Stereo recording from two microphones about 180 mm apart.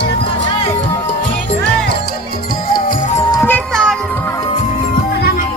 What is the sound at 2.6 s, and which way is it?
Music, 50° left (ahead or behind).